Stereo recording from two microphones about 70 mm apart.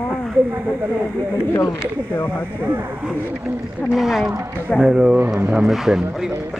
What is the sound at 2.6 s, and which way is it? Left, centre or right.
Speech, right.